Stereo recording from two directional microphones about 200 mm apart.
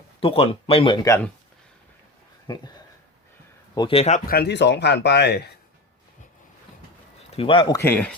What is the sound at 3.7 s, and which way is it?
Speech, 25° left (ahead or behind).